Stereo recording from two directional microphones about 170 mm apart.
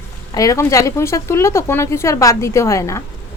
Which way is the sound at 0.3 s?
20° left (ahead or behind).